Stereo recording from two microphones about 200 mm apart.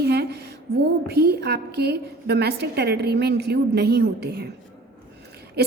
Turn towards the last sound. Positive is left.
turn(degrees=-55)  # may be behind; listen again after turning